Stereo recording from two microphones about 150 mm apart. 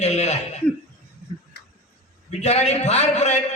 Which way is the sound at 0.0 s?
50° left (ahead or behind).